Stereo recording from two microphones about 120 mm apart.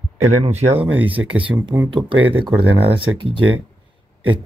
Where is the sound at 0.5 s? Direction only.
60° right (ahead or behind).